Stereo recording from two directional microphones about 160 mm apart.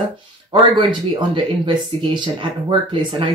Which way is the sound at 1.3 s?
30° right (ahead or behind).